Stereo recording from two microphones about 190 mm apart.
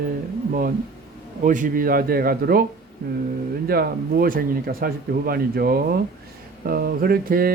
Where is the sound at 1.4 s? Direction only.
45° right (ahead or behind).